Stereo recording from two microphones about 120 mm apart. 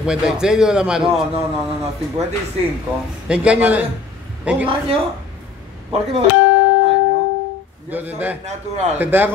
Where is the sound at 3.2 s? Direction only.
10° right (ahead or behind).